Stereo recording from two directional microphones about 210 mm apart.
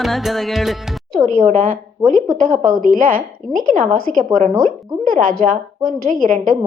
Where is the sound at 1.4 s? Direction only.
35° right (ahead or behind).